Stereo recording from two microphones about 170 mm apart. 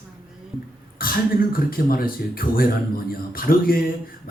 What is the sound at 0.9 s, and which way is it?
Speech, 60° left (ahead or behind).